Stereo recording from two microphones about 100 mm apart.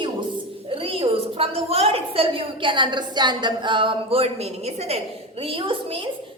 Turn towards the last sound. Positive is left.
turn(degrees=-60)  # may be behind; listen again after turning